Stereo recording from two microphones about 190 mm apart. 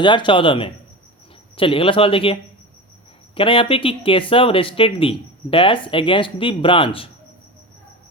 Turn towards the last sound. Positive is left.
turn(degrees=25)  # may be behind; listen again after turning